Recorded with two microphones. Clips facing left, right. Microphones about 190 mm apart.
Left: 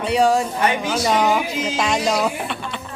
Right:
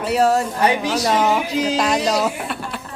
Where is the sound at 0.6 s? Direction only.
35° right (ahead or behind).